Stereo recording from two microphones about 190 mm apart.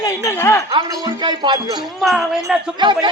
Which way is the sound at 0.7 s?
25° right (ahead or behind).